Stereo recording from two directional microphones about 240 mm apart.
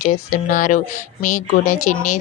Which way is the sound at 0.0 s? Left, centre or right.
Left.